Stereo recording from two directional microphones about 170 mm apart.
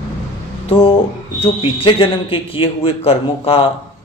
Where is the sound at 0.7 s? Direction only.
30° left (ahead or behind).